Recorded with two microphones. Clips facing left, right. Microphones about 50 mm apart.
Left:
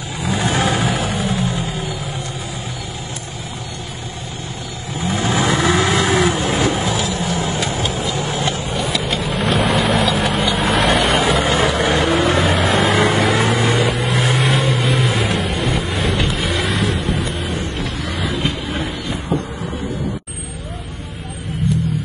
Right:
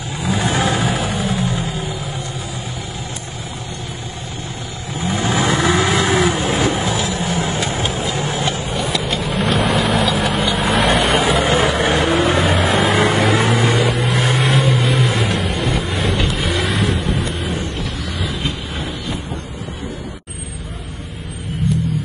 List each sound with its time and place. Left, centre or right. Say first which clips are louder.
0.2 s vehicle: even; centre
4.9 s vehicle: even; centre
11.7 s vehicle: even; right
12.0 s vehicle: even; centre